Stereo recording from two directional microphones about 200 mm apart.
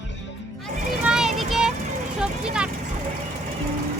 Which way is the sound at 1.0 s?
5° right (ahead or behind).